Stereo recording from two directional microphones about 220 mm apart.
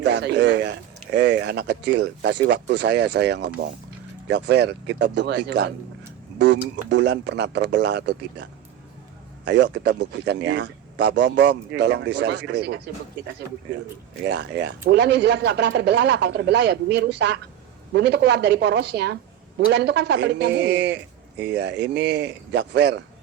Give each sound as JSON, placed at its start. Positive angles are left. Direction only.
{"t": 0.0, "sound": "a woman's voice", "side_deg": -50}